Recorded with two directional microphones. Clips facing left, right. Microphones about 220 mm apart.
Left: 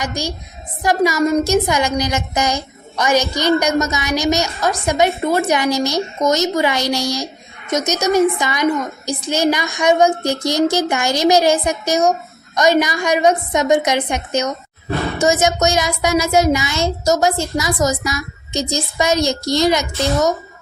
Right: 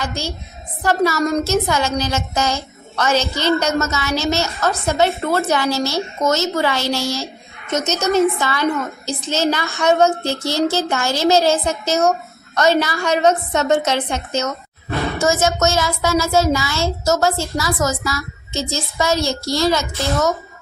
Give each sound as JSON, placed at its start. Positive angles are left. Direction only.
{"t": 0.0, "sound": "speech", "side_deg": 15}